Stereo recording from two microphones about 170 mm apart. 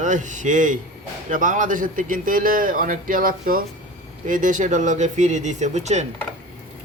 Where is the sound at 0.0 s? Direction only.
45° right (ahead or behind).